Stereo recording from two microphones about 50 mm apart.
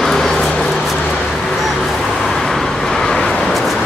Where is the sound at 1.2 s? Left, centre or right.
Centre.